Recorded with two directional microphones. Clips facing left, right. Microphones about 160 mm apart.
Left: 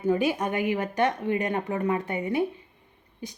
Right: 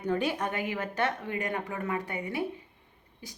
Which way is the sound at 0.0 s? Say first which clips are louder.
Left 5 dB; 10° left (ahead or behind).